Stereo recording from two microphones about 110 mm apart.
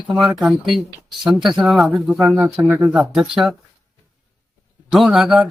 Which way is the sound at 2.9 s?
5° right (ahead or behind).